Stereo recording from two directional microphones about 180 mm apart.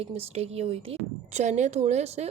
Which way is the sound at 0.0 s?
35° right (ahead or behind).